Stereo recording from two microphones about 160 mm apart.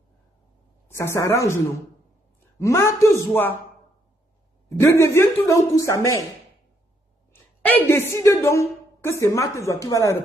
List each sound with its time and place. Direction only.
0.9 s a woman's voice: 20° left (ahead or behind)
2.6 s a woman's voice: 20° left (ahead or behind)
4.6 s a woman's voice: 15° left (ahead or behind)
7.6 s a woman's voice: 10° left (ahead or behind)